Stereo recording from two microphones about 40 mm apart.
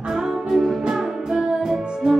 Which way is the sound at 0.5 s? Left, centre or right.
Centre.